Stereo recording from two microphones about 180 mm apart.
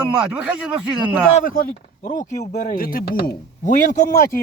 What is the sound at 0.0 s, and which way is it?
Speech, 5° right (ahead or behind).